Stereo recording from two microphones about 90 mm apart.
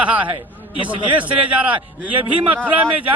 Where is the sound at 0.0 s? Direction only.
15° right (ahead or behind).